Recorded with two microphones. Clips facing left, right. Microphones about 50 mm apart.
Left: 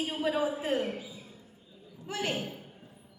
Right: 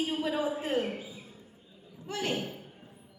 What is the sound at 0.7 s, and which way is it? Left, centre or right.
Speech, centre.